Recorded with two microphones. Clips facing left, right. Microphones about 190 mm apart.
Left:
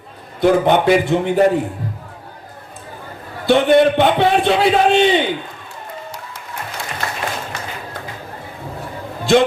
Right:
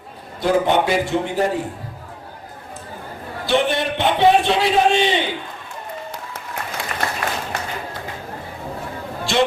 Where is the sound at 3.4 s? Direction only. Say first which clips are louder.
Left 8 dB; 55° left (ahead or behind).